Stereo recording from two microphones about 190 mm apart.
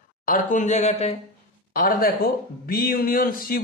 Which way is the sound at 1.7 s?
50° left (ahead or behind).